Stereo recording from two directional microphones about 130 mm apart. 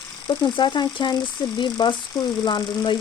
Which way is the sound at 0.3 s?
35° left (ahead or behind).